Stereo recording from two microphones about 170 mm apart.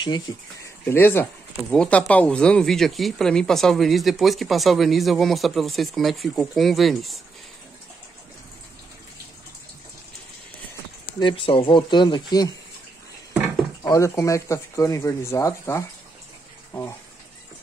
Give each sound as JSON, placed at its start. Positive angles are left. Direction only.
{"t": 0.8, "sound": "speech", "side_deg": 15}
{"t": 11.1, "sound": "speech", "side_deg": 30}
{"t": 13.8, "sound": "speech", "side_deg": 20}